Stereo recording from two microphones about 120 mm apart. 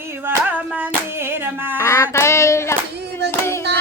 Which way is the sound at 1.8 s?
25° left (ahead or behind).